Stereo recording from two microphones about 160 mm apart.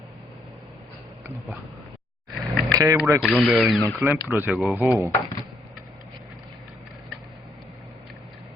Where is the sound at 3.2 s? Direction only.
Centre (ahead or behind).